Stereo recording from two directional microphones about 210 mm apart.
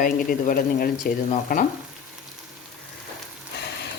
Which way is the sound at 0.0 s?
40° left (ahead or behind).